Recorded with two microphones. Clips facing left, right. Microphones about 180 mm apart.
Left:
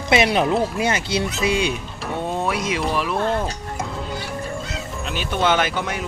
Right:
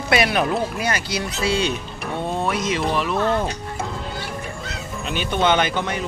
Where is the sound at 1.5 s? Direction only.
10° left (ahead or behind).